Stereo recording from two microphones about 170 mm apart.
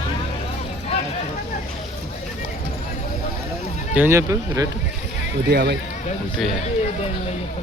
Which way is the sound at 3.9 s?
10° right (ahead or behind).